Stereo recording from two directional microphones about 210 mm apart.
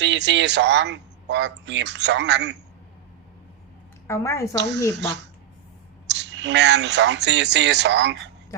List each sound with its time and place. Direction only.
0.0 s speech: 55° right (ahead or behind)
4.0 s a woman's voice: 15° left (ahead or behind)
4.9 s speech: 55° right (ahead or behind)